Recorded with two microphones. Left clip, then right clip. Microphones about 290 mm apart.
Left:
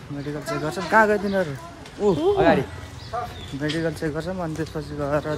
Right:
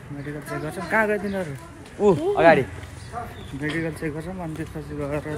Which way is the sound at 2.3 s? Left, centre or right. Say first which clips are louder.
Right 5 dB; centre.